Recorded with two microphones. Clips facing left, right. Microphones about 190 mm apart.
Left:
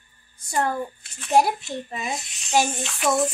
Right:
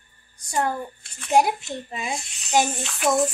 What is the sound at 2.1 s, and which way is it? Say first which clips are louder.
Speech: right 1 dB; 20° right (ahead or behind).